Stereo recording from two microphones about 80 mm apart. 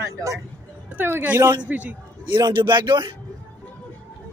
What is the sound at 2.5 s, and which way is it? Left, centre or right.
Speech, right.